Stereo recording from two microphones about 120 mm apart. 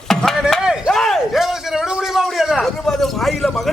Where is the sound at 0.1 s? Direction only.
5° left (ahead or behind).